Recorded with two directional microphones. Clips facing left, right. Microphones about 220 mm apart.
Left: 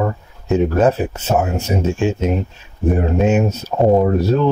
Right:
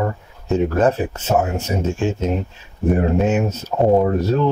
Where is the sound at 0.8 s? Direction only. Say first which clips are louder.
Left 2 dB; 10° left (ahead or behind).